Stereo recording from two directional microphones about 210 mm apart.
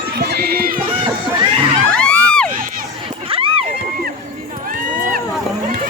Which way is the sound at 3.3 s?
25° right (ahead or behind).